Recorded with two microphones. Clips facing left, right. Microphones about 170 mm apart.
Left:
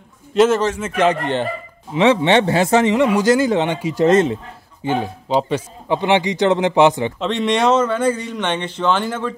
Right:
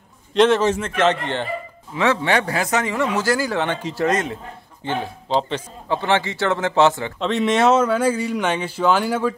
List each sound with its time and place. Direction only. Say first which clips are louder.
0.3 s a man's voice: left 1 dB; 5° left (ahead or behind)
2.0 s a man's voice: left 5 dB; 25° left (ahead or behind)
4.0 s speech: left 8 dB; 25° left (ahead or behind)
4.8 s a man's voice: left 5 dB; 15° left (ahead or behind)
7.2 s speech: even; centre (ahead or behind)